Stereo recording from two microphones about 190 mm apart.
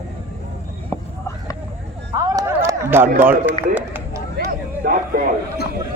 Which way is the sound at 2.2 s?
20° right (ahead or behind).